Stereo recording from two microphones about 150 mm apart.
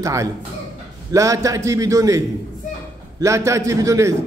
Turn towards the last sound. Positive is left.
turn(degrees=-20)  # may be behind; listen again after turning